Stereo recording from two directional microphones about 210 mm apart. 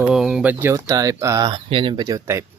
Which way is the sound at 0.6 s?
15° right (ahead or behind).